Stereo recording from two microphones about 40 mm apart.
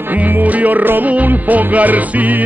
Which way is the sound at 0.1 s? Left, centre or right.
Right.